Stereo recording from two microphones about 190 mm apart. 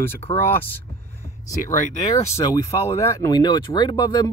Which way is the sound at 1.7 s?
40° left (ahead or behind).